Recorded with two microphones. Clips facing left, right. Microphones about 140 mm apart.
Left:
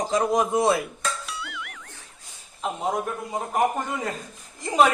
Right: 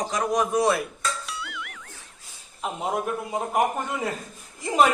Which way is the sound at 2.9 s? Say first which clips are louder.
Right 2 dB; 5° right (ahead or behind).